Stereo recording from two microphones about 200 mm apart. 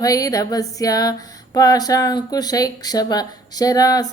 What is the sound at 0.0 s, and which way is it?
Music, 15° left (ahead or behind).